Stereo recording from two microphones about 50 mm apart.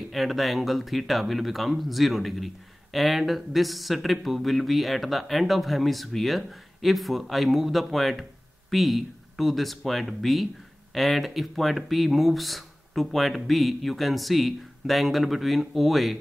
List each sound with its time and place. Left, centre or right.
0.1 s speech: centre